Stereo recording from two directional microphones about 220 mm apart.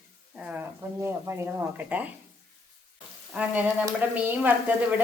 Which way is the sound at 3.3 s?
5° right (ahead or behind).